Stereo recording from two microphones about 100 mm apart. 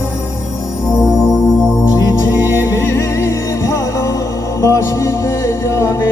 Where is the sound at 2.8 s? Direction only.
25° left (ahead or behind).